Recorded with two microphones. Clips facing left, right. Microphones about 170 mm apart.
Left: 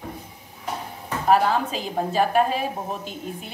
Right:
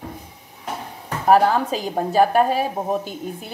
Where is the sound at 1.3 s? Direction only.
40° right (ahead or behind).